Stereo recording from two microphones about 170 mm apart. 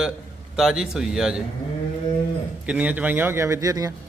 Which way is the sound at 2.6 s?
10° right (ahead or behind).